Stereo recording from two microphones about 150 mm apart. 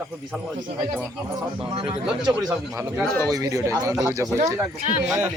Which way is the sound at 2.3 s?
25° right (ahead or behind).